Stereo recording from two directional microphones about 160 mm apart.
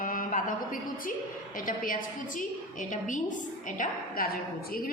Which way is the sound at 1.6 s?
60° left (ahead or behind).